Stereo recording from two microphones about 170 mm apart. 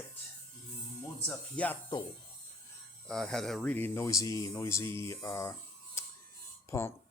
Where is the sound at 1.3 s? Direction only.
10° left (ahead or behind).